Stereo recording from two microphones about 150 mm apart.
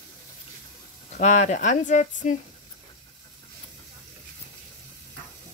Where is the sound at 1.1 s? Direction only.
50° left (ahead or behind).